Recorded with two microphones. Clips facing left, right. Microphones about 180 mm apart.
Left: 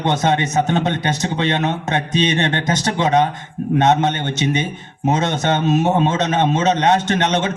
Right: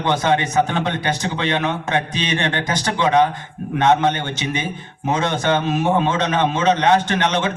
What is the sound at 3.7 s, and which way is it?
A man's voice, 25° left (ahead or behind).